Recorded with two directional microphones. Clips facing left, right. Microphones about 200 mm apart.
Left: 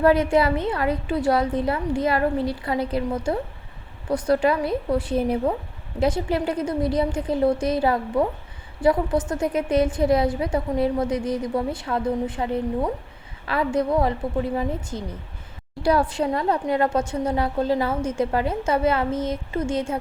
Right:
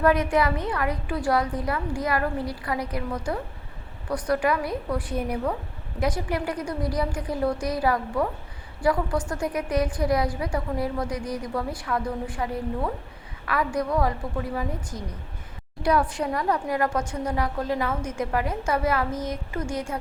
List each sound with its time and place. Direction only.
0.0 s a woman's voice: 30° left (ahead or behind)